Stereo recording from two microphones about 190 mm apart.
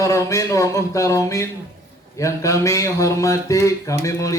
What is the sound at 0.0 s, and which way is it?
Speech, 15° left (ahead or behind).